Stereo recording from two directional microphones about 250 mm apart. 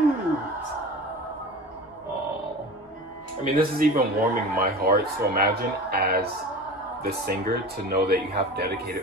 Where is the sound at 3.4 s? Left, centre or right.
Right.